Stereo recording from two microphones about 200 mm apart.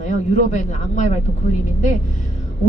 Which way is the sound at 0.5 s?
40° left (ahead or behind).